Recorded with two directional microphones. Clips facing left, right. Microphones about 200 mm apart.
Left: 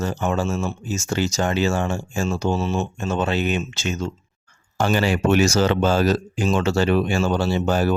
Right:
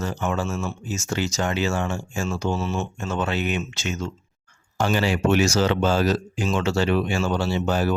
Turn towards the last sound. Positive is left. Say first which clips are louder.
# left 3 dB
turn(degrees=45)  # may be behind; listen again after turning